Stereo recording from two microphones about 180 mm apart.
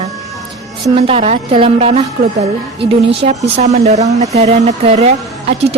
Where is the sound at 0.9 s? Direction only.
30° right (ahead or behind).